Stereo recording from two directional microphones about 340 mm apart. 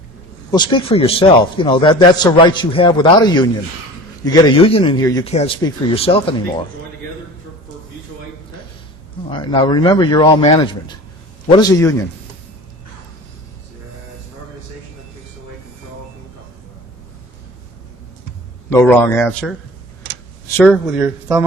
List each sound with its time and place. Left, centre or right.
0.5 s a man's voice: centre
9.3 s a man's voice: centre
18.7 s speech: centre